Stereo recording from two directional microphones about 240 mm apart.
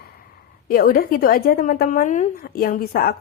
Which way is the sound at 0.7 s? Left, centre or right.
Left.